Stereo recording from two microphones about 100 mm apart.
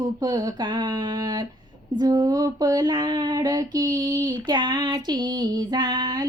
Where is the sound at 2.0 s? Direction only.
40° right (ahead or behind).